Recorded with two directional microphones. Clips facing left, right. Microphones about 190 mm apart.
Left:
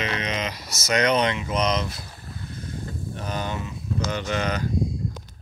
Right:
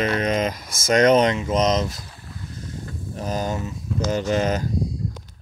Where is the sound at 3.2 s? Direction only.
40° right (ahead or behind).